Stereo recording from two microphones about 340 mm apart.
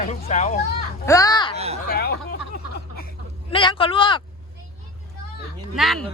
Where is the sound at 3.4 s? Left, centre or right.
Centre.